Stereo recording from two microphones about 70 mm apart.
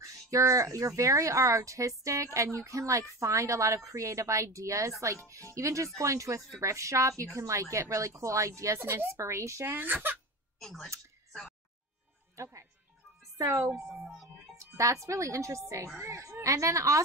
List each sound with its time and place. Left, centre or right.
0.0 s speech: right
8.7 s speech: right
9.7 s speech: right
10.6 s speech: centre
12.4 s speech: right
13.9 s music: centre
14.6 s speech: right